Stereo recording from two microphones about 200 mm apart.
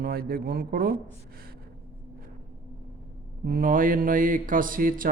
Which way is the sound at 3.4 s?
45° right (ahead or behind).